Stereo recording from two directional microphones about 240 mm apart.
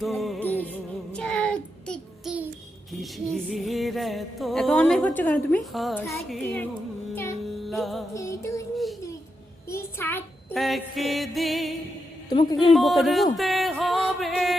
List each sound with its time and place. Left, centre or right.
0.0 s music: centre
6.3 s a man's voice: centre
7.7 s music: centre
8.1 s music: centre
8.7 s a sound: centre
9.6 s female singing: centre
12.3 s a man's voice: centre
12.7 s music: centre